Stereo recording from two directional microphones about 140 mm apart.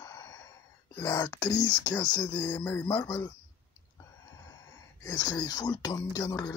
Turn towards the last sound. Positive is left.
turn(degrees=30)  # may be behind; listen again after turning